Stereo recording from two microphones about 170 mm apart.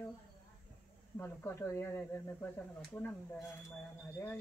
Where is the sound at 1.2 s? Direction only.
10° left (ahead or behind).